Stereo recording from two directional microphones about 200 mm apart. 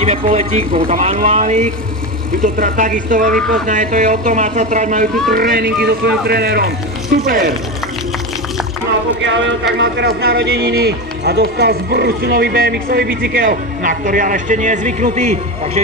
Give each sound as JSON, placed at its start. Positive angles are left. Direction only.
{"t": 0.0, "sound": "speech", "side_deg": -35}
{"t": 3.3, "sound": "speech", "side_deg": 0}
{"t": 3.6, "sound": "speech", "side_deg": -40}
{"t": 9.2, "sound": "speech", "side_deg": -65}